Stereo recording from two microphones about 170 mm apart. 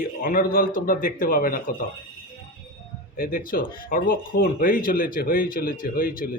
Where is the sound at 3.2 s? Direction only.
55° left (ahead or behind).